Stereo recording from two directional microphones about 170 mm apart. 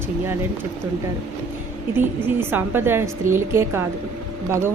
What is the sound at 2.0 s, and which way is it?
A woman's voice, 10° right (ahead or behind).